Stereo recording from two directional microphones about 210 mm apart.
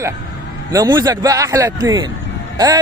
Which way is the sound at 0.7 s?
15° right (ahead or behind).